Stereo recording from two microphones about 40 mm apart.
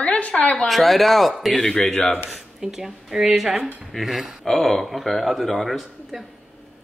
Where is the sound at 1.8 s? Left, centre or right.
Left.